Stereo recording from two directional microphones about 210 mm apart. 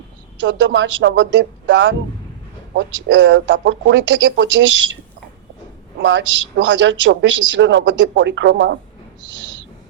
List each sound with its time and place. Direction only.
0.4 s a woman's voice: 60° right (ahead or behind)
6.0 s a woman's voice: 60° right (ahead or behind)